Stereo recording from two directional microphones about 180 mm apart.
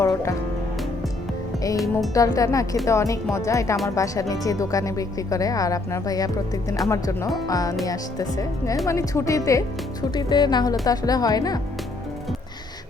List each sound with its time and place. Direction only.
0.0 s speech: 15° left (ahead or behind)
1.7 s speech: centre (ahead or behind)
2.1 s speech: 20° left (ahead or behind)